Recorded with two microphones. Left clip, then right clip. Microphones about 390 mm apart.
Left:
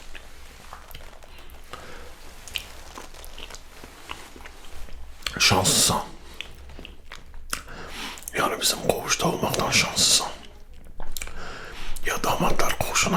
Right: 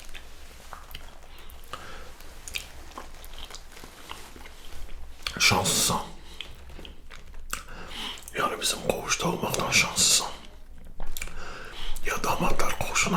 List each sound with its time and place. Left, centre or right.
2.5 s squish: centre
4.1 s a sound: left
11.2 s whispering: left